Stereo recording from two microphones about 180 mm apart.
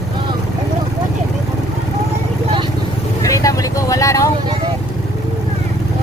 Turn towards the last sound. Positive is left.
turn(degrees=15)  # may be behind; listen again after turning